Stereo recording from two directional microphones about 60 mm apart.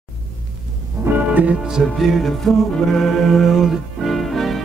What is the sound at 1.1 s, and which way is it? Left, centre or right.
Music, right.